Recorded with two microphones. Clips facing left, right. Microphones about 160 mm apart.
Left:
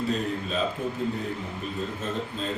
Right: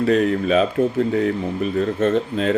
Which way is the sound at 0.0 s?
75° right (ahead or behind).